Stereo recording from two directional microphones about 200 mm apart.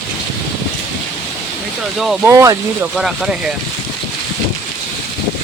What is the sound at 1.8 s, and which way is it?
Speech, centre (ahead or behind).